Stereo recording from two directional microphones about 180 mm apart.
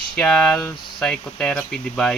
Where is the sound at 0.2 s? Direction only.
5° left (ahead or behind).